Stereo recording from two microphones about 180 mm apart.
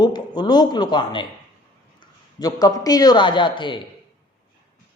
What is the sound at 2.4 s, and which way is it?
A woman's voice, 20° left (ahead or behind).